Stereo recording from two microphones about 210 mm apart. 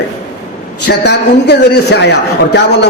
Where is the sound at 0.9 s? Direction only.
55° left (ahead or behind).